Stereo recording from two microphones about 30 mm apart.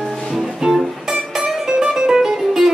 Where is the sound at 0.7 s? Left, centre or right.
Centre.